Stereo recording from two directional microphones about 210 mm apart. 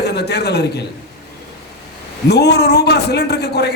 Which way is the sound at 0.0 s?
50° left (ahead or behind).